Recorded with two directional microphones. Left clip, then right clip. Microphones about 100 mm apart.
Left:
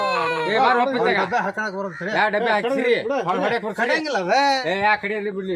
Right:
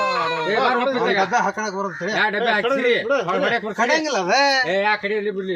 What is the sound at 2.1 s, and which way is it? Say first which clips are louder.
Speech: even; 50° left (ahead or behind).